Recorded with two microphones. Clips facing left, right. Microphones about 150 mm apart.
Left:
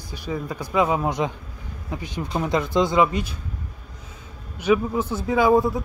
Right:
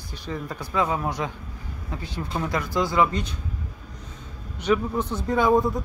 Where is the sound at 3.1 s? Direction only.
5° left (ahead or behind).